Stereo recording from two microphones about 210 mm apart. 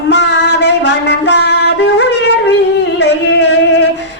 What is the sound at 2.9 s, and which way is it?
Music, 55° left (ahead or behind).